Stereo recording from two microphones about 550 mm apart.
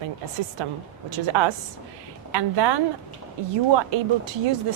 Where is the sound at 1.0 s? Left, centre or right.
Right.